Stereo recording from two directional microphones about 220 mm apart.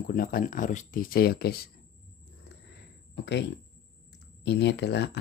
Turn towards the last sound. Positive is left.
turn(degrees=50)  # may be behind; listen again after turning